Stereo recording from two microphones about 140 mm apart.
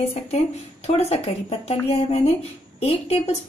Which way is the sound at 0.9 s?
45° left (ahead or behind).